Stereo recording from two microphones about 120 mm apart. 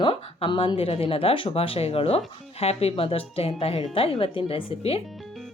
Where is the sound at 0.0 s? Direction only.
50° left (ahead or behind).